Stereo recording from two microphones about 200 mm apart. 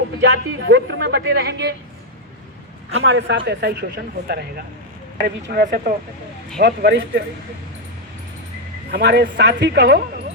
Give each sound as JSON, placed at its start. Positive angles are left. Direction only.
{"t": 0.2, "sound": "speech", "side_deg": -60}
{"t": 3.0, "sound": "speech", "side_deg": -65}
{"t": 8.9, "sound": "speech", "side_deg": -55}